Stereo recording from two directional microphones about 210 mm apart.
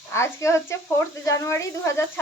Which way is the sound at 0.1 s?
15° left (ahead or behind).